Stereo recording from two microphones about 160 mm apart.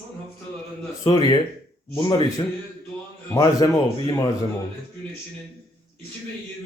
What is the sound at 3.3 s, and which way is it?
Speech, 25° left (ahead or behind).